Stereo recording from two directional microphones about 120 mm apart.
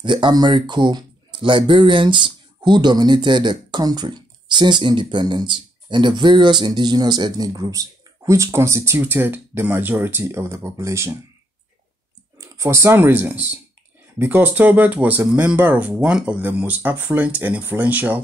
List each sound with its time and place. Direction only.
0.0 s speech: 40° right (ahead or behind); by 11.1 s 25° right (ahead or behind)
12.4 s speech: 25° right (ahead or behind)